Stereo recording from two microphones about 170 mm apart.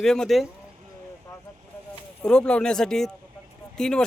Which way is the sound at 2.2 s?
5° left (ahead or behind).